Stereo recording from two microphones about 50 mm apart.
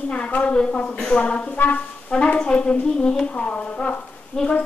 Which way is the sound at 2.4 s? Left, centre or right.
Left.